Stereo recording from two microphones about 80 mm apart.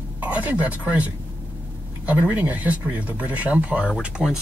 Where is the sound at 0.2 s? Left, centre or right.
Centre.